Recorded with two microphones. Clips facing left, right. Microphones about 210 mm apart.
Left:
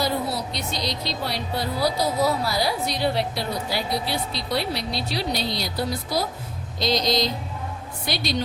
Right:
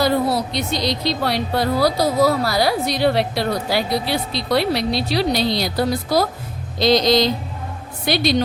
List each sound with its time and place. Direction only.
0.0 s speech: 80° right